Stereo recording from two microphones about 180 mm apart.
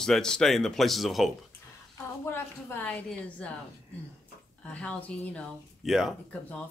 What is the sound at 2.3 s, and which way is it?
A woman's voice, 10° left (ahead or behind).